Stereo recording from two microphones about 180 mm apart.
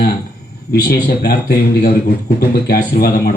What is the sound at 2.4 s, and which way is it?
Speech, 60° left (ahead or behind).